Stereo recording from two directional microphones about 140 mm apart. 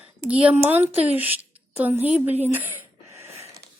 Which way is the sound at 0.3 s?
10° right (ahead or behind).